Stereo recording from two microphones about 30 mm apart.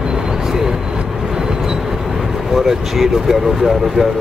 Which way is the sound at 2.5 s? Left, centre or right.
Centre.